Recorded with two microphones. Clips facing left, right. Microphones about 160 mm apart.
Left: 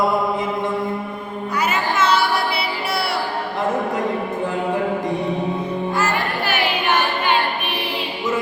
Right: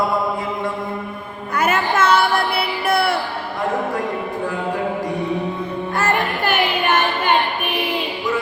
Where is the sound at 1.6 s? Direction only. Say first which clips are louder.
Right 3 dB; 50° right (ahead or behind).